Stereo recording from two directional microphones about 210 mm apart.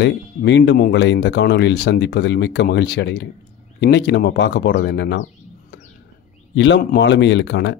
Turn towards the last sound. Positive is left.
turn(degrees=55)  # may be behind; listen again after turning